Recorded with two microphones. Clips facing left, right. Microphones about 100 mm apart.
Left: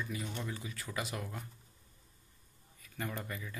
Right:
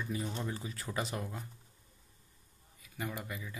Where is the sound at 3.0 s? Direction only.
10° right (ahead or behind).